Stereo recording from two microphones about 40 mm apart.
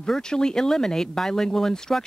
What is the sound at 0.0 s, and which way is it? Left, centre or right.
Speech, centre.